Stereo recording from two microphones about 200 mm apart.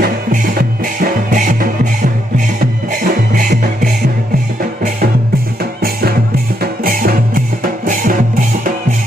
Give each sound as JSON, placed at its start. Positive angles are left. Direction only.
{"t": 0.0, "sound": "music", "side_deg": -45}
{"t": 3.3, "sound": "music", "side_deg": -45}
{"t": 5.8, "sound": "music", "side_deg": -50}